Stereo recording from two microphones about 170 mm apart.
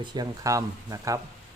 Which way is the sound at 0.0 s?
25° right (ahead or behind).